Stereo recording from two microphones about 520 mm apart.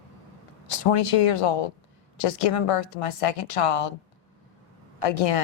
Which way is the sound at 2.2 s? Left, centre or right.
Left.